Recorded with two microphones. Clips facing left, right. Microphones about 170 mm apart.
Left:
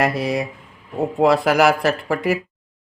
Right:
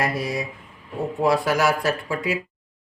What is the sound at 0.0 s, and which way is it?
Speech, 70° left (ahead or behind).